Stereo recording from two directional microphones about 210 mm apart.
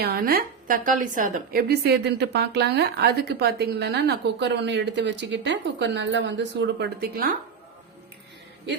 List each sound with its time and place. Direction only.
0.0 s a woman's voice: 45° right (ahead or behind)